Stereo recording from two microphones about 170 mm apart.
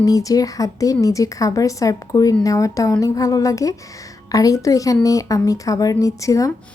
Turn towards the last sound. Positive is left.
turn(degrees=20)  # may be behind; listen again after turning